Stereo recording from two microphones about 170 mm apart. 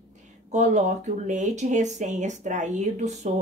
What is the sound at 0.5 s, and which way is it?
A woman's voice, 45° right (ahead or behind).